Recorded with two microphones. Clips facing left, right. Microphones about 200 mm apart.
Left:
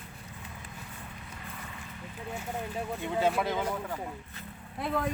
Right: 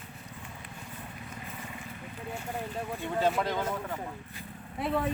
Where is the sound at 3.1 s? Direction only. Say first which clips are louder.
Even; 5° left (ahead or behind).